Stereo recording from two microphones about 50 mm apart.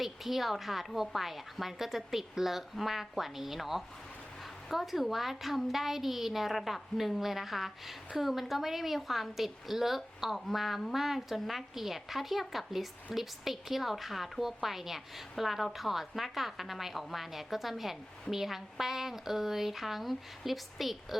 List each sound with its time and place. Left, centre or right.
0.0 s a woman's voice: centre